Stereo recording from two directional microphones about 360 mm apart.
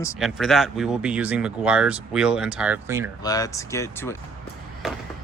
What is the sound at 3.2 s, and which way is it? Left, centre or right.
Speech, centre.